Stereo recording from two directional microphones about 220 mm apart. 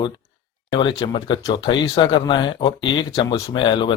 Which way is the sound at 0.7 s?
20° left (ahead or behind).